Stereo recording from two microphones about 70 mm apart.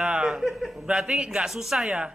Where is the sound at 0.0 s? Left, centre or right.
Centre.